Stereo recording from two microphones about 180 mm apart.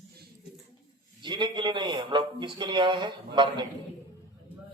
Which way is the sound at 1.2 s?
25° right (ahead or behind).